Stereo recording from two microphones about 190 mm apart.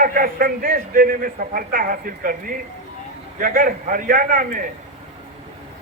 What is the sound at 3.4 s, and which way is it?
A man's voice, 45° right (ahead or behind).